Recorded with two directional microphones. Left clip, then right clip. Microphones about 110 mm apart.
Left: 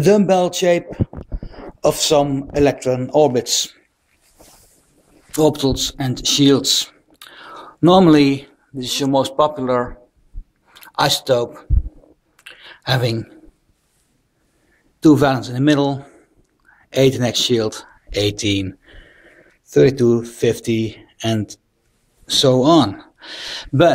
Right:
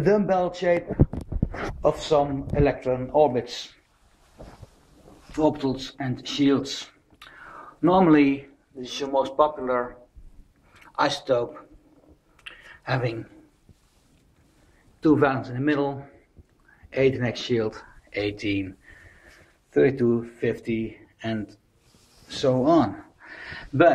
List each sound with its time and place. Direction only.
0.0 s a man's voice: 30° left (ahead or behind)
5.4 s speech: 45° left (ahead or behind)
7.2 s speech: 35° left (ahead or behind)
10.7 s a sound: 40° left (ahead or behind)
15.0 s a man's voice: 40° left (ahead or behind)
22.8 s gasp: 40° left (ahead or behind)
23.2 s speech: 50° left (ahead or behind)